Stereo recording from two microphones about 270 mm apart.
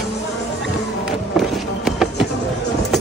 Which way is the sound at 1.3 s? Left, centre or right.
Centre.